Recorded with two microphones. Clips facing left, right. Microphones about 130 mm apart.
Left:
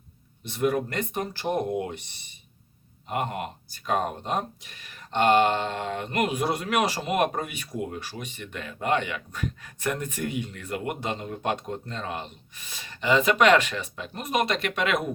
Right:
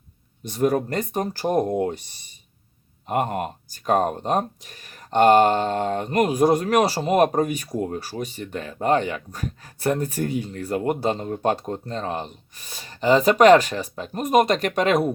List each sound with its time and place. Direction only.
0.4 s speech: 40° right (ahead or behind)